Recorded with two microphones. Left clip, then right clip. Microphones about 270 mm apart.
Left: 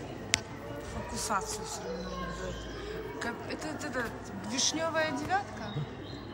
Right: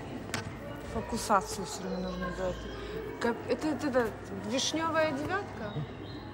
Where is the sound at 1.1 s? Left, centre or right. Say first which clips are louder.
Right 5 dB; centre.